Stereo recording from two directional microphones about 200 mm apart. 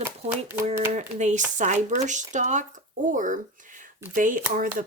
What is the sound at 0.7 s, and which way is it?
Speech, 35° right (ahead or behind).